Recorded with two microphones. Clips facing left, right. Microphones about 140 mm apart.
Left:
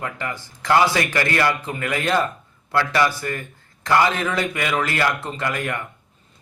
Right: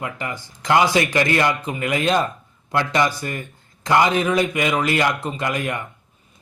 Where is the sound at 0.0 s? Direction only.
15° right (ahead or behind).